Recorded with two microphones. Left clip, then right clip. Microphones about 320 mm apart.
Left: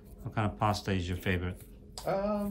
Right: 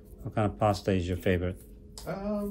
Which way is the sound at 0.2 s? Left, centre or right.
Centre.